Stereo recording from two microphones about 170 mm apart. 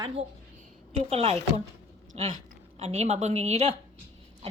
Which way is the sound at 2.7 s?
40° right (ahead or behind).